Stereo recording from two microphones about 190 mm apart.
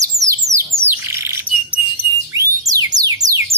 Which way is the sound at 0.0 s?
15° right (ahead or behind).